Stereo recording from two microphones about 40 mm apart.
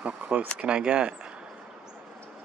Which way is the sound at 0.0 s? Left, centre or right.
Right.